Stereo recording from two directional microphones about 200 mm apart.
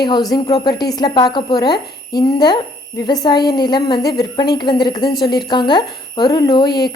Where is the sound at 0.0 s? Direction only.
20° left (ahead or behind).